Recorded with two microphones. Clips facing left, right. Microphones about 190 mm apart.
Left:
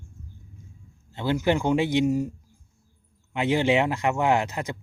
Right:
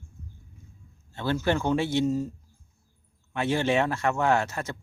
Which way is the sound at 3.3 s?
15° left (ahead or behind).